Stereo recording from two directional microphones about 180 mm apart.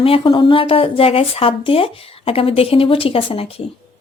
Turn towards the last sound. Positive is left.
turn(degrees=30)  # may be behind; listen again after turning